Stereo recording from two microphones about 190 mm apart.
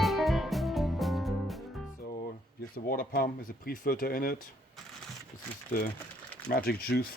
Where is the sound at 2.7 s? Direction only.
50° left (ahead or behind).